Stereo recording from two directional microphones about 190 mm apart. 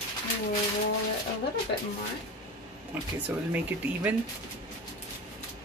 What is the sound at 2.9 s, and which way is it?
Speech, 10° right (ahead or behind).